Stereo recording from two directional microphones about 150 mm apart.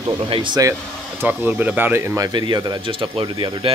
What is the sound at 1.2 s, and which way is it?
Speech, 15° right (ahead or behind).